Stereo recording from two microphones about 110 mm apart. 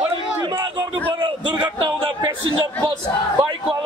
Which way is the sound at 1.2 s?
50° right (ahead or behind).